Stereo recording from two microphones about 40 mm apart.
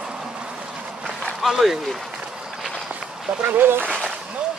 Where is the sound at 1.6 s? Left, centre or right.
Centre.